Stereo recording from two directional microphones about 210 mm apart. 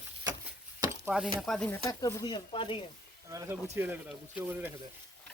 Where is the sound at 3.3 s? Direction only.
15° right (ahead or behind).